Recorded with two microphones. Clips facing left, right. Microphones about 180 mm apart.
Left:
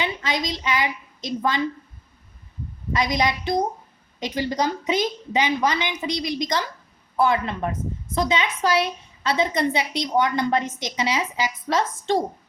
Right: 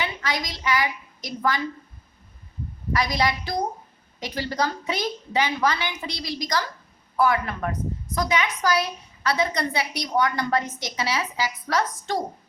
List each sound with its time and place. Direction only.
0.0 s a woman's voice: 20° left (ahead or behind)
2.9 s a woman's voice: 20° left (ahead or behind)